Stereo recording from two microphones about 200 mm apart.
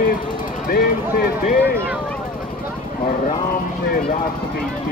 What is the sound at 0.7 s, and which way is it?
Speech, 50° left (ahead or behind).